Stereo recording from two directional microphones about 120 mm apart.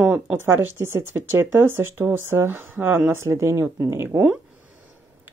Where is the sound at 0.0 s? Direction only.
15° right (ahead or behind).